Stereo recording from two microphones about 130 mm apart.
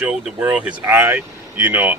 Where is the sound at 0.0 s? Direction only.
10° right (ahead or behind).